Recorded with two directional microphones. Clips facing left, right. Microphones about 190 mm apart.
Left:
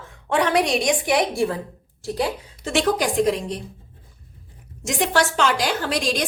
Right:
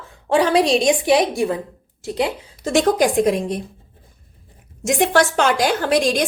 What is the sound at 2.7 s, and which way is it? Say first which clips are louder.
Speech: right 4 dB; 50° right (ahead or behind).